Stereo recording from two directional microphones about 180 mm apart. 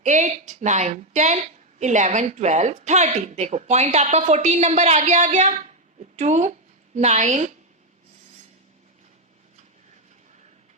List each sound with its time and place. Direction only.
0.0 s a woman's voice: 40° right (ahead or behind)